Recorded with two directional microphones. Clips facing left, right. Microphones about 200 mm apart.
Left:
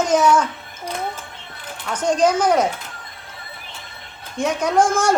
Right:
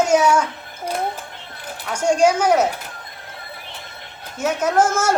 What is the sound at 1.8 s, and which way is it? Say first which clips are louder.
Speech: right 1 dB; 10° right (ahead or behind).